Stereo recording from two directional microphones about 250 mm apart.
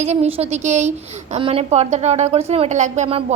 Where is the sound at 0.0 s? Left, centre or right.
Right.